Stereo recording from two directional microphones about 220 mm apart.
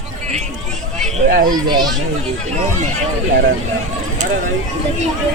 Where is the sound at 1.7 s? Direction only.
20° right (ahead or behind).